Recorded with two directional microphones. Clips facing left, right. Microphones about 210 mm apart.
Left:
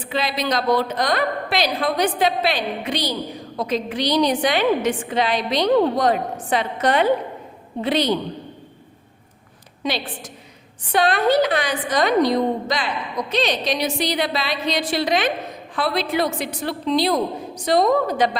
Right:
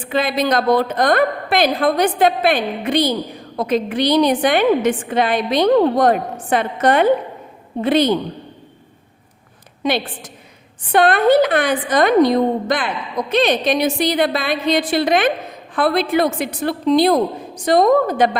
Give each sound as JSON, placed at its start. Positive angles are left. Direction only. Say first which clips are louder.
{"t": 0.1, "sound": "a woman's voice", "louder": "right 5 dB", "side_deg": -55}
{"t": 9.8, "sound": "a woman's voice", "louder": "right 5 dB", "side_deg": -55}